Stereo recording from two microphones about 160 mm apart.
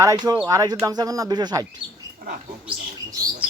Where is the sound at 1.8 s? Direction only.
25° left (ahead or behind).